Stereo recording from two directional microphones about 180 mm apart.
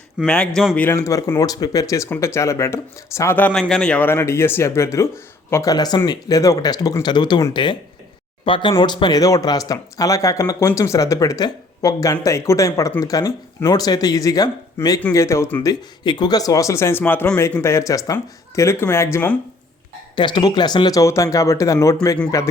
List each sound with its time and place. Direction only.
0.2 s speech: 5° left (ahead or behind)
0.8 s speech: 15° left (ahead or behind)
15.7 s speech: 25° left (ahead or behind)
20.1 s speech: 25° left (ahead or behind)